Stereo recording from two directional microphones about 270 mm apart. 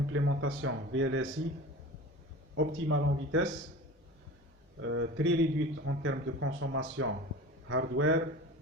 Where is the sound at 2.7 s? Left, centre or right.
Right.